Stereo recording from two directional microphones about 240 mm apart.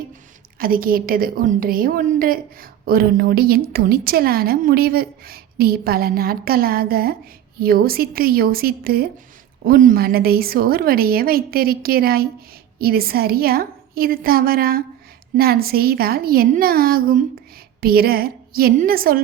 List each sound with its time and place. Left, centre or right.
0.6 s a woman's voice: right